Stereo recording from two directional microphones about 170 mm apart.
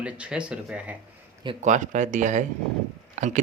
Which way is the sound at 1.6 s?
45° right (ahead or behind).